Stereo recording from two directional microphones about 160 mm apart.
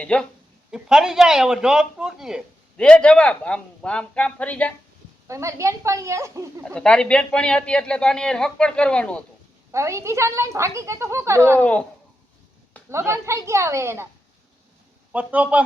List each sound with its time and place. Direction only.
0.0 s speech: 5° left (ahead or behind)
0.7 s speech: 5° right (ahead or behind)
5.3 s a woman's voice: 20° right (ahead or behind)
6.6 s speech: 5° left (ahead or behind)
9.7 s a woman's voice: 15° right (ahead or behind)
11.6 s speech: 10° left (ahead or behind)
12.9 s a woman's voice: 15° right (ahead or behind)
15.1 s a woman's voice: 10° right (ahead or behind)